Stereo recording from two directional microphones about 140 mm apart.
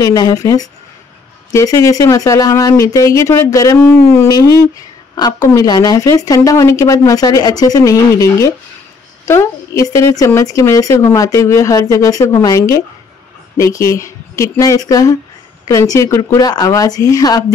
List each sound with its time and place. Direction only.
0.0 s speech: 25° left (ahead or behind)